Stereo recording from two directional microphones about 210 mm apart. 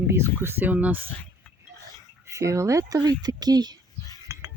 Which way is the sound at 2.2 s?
15° right (ahead or behind).